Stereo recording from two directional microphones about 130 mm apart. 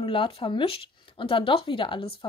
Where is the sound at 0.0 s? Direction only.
40° left (ahead or behind).